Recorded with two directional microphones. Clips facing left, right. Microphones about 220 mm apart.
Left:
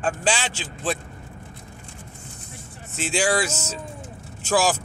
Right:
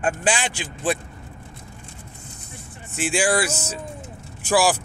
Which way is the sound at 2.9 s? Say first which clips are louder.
Right 1 dB; 15° right (ahead or behind).